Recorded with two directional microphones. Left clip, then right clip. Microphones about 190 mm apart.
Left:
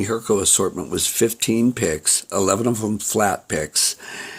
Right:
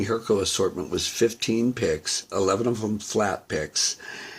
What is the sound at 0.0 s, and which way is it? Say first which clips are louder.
Speech: left 3 dB; 45° left (ahead or behind).